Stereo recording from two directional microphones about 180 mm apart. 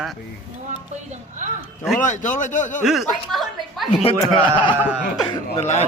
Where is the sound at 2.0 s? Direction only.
45° left (ahead or behind).